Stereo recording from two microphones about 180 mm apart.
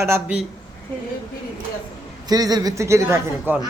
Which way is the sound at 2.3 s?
20° right (ahead or behind).